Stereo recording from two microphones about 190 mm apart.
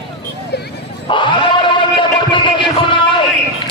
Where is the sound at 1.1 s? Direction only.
25° left (ahead or behind).